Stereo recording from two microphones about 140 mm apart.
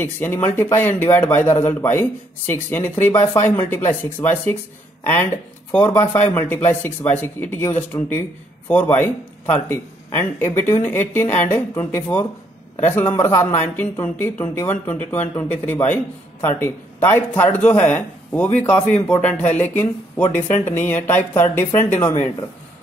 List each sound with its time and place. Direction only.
0.0 s speech: 15° left (ahead or behind)